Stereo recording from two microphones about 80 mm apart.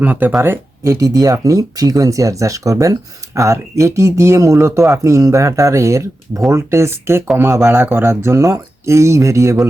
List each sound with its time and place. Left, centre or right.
0.0 s speech: centre
0.9 s speech: right